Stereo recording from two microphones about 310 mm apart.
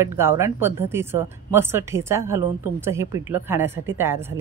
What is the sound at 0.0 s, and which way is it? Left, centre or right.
Speech, centre.